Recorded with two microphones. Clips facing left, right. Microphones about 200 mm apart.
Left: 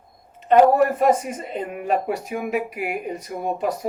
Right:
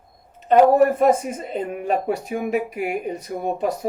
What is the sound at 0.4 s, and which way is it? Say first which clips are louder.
A woman's voice: right 1 dB; 45° right (ahead or behind).